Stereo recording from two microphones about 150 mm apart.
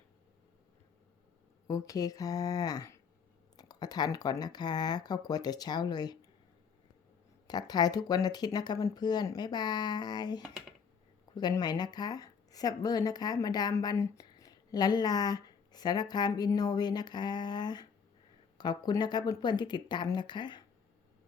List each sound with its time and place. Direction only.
1.6 s speech: 25° left (ahead or behind)
7.4 s speech: 25° left (ahead or behind)